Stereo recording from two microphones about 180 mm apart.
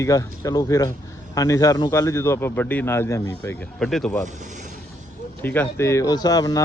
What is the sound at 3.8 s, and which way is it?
Speech, centre (ahead or behind).